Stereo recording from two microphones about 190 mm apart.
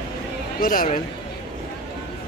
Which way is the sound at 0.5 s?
50° left (ahead or behind).